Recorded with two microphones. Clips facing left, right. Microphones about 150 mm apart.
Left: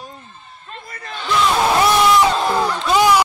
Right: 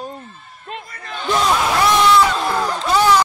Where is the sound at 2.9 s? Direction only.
15° left (ahead or behind).